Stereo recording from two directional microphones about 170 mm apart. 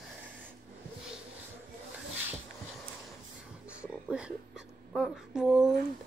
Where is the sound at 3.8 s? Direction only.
5° right (ahead or behind).